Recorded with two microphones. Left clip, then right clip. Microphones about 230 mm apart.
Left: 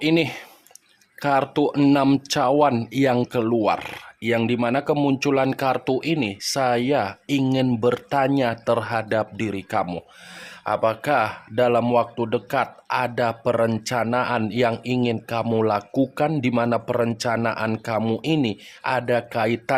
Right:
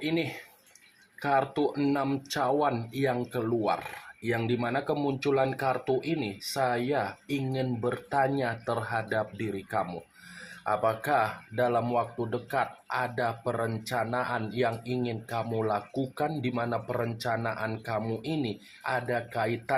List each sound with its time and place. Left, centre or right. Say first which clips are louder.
0.0 s speech: left 10 dB; left